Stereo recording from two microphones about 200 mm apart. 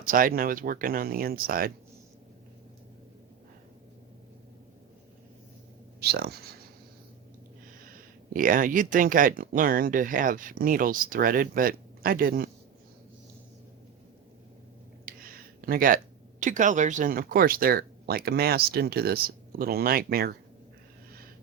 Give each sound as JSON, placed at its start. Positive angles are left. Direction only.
{"t": 0.0, "sound": "speech", "side_deg": -45}
{"t": 6.0, "sound": "speech", "side_deg": -55}
{"t": 8.3, "sound": "speech", "side_deg": -45}
{"t": 15.0, "sound": "a sound", "side_deg": -45}
{"t": 16.4, "sound": "speech", "side_deg": -40}